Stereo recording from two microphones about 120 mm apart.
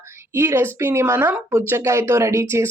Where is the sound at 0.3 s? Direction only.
20° right (ahead or behind).